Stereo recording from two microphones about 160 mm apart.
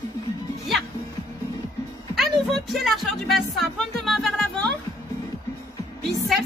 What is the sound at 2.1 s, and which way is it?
Music, centre (ahead or behind).